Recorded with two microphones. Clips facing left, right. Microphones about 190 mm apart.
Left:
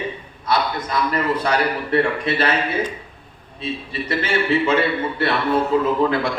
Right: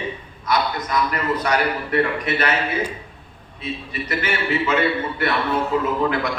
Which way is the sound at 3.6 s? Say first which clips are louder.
Left 2 dB; 30° left (ahead or behind).